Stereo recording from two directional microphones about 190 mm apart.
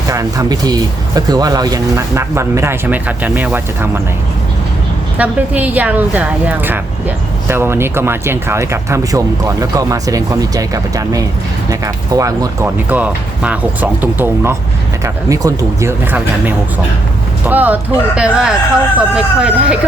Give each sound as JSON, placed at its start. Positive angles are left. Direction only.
{"t": 0.1, "sound": "speech", "side_deg": -15}
{"t": 5.1, "sound": "speech", "side_deg": -10}
{"t": 17.4, "sound": "speech", "side_deg": -10}